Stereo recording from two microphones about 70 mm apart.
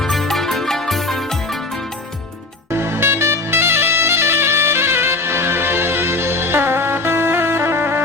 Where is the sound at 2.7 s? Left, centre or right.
Right.